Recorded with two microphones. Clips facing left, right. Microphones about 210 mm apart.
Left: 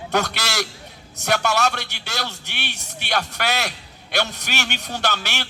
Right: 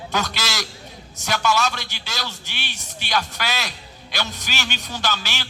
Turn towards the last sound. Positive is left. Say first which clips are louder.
# left 2 dB
turn(degrees=60)  # may be behind; listen again after turning